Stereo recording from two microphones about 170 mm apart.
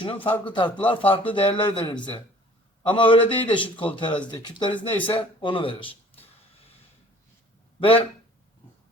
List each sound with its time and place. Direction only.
0.3 s a man's voice: 30° left (ahead or behind)
7.8 s speech: 30° left (ahead or behind)